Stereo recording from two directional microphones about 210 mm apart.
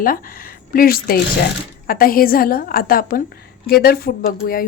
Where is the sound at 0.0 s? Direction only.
40° left (ahead or behind).